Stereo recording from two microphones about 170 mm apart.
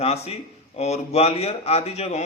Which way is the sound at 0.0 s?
35° left (ahead or behind).